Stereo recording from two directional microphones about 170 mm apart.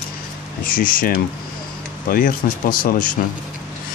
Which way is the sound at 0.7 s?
55° left (ahead or behind).